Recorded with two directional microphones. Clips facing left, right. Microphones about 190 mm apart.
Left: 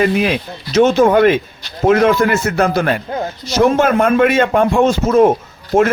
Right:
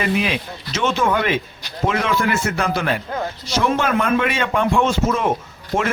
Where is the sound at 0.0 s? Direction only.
45° left (ahead or behind).